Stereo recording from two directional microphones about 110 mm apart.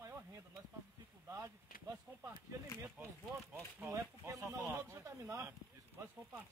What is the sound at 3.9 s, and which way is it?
Speech, 30° right (ahead or behind).